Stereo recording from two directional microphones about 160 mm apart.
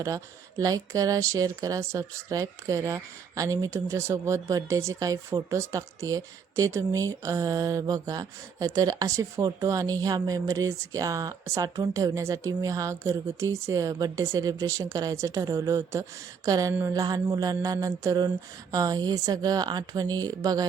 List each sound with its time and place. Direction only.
0.6 s speech: 20° right (ahead or behind)